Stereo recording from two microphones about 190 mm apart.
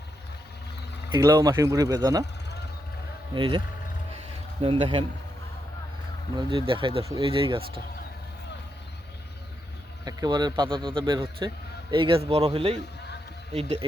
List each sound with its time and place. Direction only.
1.1 s a man's voice: 20° right (ahead or behind)
3.3 s a man's voice: 25° right (ahead or behind)
4.6 s a man's voice: 25° right (ahead or behind)
6.3 s a man's voice: 25° right (ahead or behind)
10.0 s a man's voice: 20° right (ahead or behind)